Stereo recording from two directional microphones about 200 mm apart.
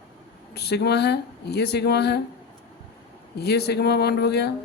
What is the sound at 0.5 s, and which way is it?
Speech, 55° left (ahead or behind).